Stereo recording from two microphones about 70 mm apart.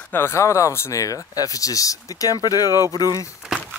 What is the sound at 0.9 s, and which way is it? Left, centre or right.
Speech, left.